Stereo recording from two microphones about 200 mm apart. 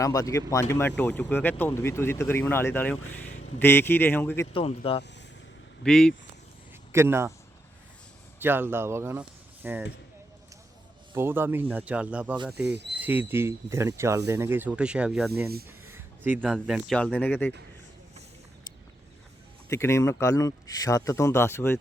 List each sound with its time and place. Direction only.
0.0 s speech: 15° left (ahead or behind)
4.5 s speech: 30° left (ahead or behind)
5.8 s speech: 5° left (ahead or behind)
6.9 s speech: 10° right (ahead or behind)
8.4 s speech: 10° right (ahead or behind)
11.1 s speech: 10° right (ahead or behind); by 17.5 s 10° left (ahead or behind)
19.6 s speech: 15° left (ahead or behind)